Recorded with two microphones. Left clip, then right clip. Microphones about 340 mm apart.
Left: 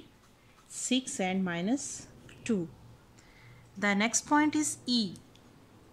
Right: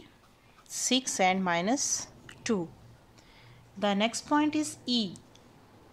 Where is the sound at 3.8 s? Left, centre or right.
Centre.